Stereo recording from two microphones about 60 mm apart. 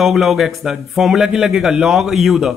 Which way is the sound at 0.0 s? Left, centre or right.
Centre.